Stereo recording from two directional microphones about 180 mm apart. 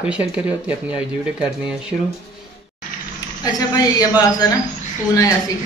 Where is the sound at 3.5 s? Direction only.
20° left (ahead or behind).